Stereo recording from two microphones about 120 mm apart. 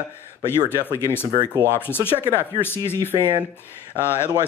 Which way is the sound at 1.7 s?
20° left (ahead or behind).